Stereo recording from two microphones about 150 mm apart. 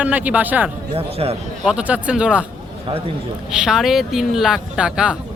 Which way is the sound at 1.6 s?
5° right (ahead or behind).